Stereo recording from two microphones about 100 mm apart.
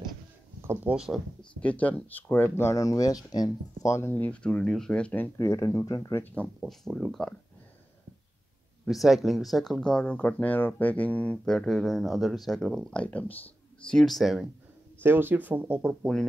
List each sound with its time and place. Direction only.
0.8 s speech: 5° right (ahead or behind)
1.4 s speech: 15° left (ahead or behind)
5.4 s speech: 30° left (ahead or behind)
6.4 s speech: centre (ahead or behind)
8.8 s speech: centre (ahead or behind)
15.0 s speech: 20° right (ahead or behind)